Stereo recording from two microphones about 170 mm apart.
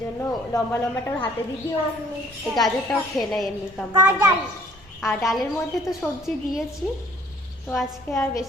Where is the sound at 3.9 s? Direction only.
15° right (ahead or behind).